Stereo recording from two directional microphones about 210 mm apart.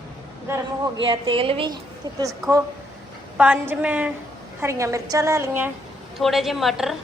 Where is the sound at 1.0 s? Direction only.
25° right (ahead or behind).